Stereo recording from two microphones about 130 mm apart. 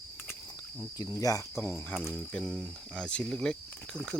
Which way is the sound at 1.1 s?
25° left (ahead or behind).